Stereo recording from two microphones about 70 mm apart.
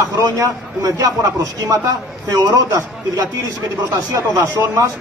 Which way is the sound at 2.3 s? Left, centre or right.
Right.